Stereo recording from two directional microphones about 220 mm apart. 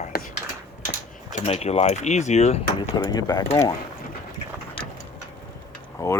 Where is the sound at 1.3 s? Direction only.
30° left (ahead or behind).